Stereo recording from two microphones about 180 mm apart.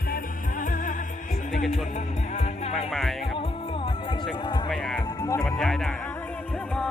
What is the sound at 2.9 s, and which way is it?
Music, centre (ahead or behind).